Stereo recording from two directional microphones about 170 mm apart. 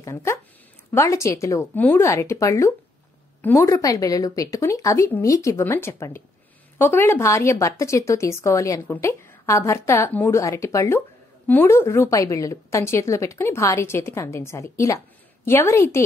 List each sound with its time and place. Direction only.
0.0 s a woman's voice: 15° left (ahead or behind)